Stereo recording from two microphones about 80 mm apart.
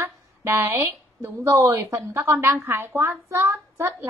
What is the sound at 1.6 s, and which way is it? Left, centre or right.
A woman's voice, right.